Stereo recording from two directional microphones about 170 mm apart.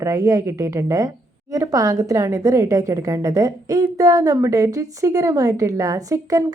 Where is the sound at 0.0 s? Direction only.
20° right (ahead or behind).